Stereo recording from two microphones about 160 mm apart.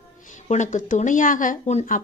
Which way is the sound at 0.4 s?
50° left (ahead or behind).